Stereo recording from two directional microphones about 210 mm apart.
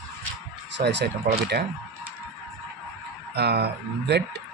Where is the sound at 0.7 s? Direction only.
55° right (ahead or behind).